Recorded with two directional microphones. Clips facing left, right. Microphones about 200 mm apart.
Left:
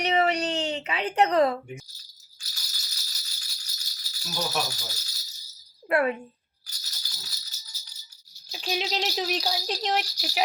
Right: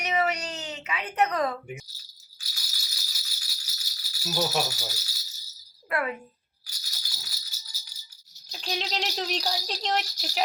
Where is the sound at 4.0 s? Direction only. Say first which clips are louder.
Right 4 dB; 5° right (ahead or behind).